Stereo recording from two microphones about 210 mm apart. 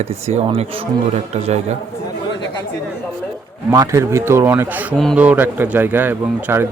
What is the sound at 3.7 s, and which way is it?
Speech, 15° right (ahead or behind).